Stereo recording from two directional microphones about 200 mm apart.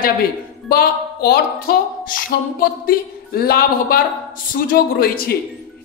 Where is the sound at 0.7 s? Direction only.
50° left (ahead or behind).